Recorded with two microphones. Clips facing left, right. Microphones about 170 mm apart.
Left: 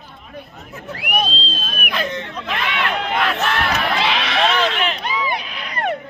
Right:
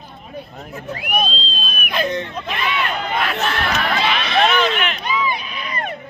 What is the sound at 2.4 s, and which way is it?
Speech, 90° left.